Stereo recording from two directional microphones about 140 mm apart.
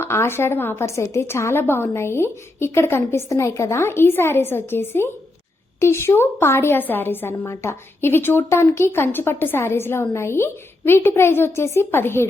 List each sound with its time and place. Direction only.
0.0 s a woman's voice: 20° left (ahead or behind)